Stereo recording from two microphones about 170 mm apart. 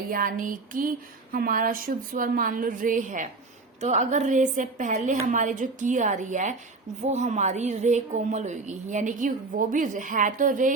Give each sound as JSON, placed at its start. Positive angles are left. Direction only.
{"t": 0.1, "sound": "speech", "side_deg": -55}